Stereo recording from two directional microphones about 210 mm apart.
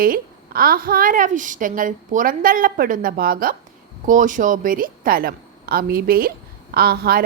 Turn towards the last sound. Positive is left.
turn(degrees=-45)  # may be behind; listen again after turning